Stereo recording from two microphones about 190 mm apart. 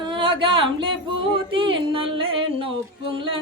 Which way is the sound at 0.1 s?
25° right (ahead or behind).